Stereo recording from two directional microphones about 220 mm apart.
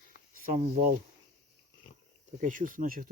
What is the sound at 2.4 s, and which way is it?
Speech, 35° right (ahead or behind).